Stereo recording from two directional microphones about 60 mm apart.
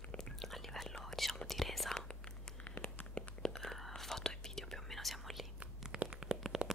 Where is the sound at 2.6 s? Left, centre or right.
Left.